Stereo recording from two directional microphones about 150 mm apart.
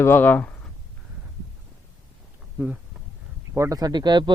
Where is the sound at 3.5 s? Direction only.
20° right (ahead or behind).